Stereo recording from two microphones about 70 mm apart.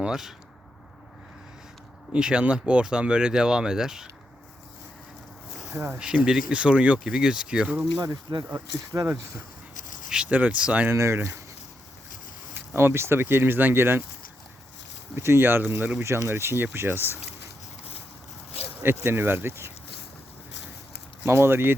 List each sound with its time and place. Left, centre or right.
0.0 s speech: centre
2.1 s speech: centre
5.7 s speech: right
6.0 s speech: centre
8.0 s speech: right
8.5 s speech: right
10.1 s speech: centre
10.8 s speech: right
12.7 s speech: right
15.1 s speech: right
18.8 s speech: right
21.2 s speech: right